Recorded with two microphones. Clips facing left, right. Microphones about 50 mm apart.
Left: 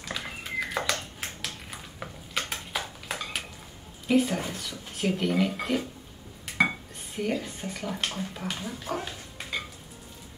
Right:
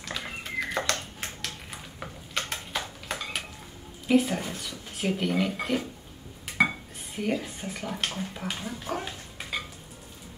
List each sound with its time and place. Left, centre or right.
0.0 s a sound: centre
4.1 s speech: centre
7.2 s speech: centre